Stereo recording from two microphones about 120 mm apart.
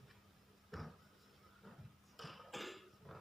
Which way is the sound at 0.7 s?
Centre (ahead or behind).